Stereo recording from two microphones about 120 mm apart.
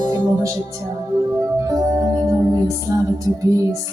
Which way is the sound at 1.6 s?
30° right (ahead or behind).